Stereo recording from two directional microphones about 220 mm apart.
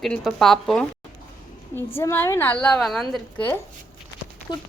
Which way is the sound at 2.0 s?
10° left (ahead or behind).